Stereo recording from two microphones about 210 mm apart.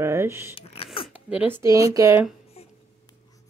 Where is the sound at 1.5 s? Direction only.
15° right (ahead or behind).